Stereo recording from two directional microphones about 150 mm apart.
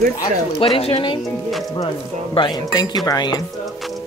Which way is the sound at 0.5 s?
40° left (ahead or behind).